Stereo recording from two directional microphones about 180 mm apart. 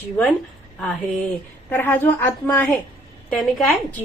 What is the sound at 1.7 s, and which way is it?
Speech, 10° left (ahead or behind).